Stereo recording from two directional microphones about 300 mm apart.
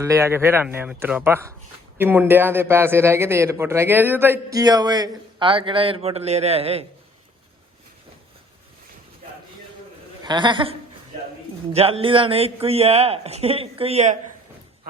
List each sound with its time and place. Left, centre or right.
0.0 s a man's voice: centre
10.2 s a man's voice: centre